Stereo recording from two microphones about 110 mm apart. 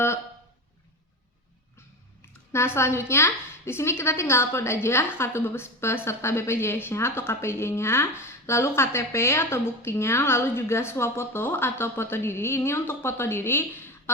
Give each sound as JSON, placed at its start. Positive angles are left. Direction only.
{"t": 2.5, "sound": "a woman's voice", "side_deg": 25}